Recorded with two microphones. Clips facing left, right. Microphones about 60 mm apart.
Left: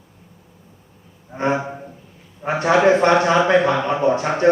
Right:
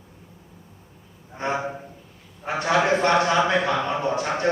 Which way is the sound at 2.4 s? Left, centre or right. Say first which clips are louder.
Left 6 dB; left.